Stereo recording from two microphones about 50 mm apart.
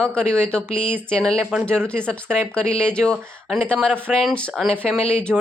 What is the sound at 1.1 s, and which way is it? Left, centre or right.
A man's voice, centre.